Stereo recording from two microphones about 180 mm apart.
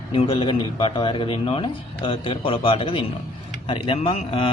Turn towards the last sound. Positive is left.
turn(degrees=30)  # may be behind; listen again after turning